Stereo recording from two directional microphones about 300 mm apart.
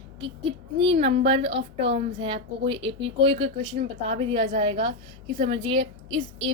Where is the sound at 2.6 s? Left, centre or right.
Centre.